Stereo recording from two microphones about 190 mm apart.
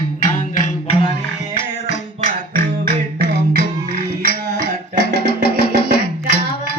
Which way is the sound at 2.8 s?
55° right (ahead or behind).